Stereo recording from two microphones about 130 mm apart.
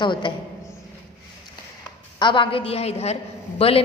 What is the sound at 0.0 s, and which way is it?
Speech, 35° left (ahead or behind).